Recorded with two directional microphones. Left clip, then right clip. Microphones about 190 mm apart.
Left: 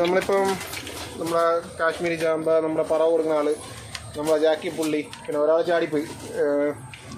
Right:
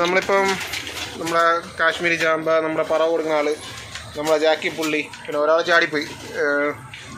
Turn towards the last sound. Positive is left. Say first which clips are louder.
# right 2 dB
turn(degrees=10)  # may be behind; listen again after turning